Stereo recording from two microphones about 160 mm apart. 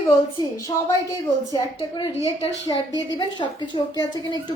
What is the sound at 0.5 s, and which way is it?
A woman's voice, 20° left (ahead or behind).